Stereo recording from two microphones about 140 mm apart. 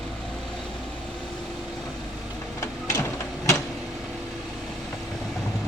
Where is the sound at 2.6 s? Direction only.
25° left (ahead or behind).